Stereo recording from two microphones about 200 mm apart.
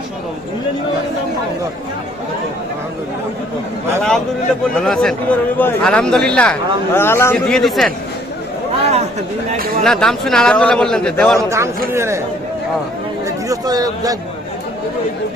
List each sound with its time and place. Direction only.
4.8 s a man's voice: 5° left (ahead or behind)
8.8 s a sound: 35° right (ahead or behind)
9.8 s a man's voice: 5° left (ahead or behind)
11.3 s a man's voice: 15° right (ahead or behind)
13.2 s speech: 20° right (ahead or behind)